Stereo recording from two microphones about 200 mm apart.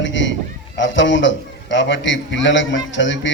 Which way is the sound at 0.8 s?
65° left (ahead or behind).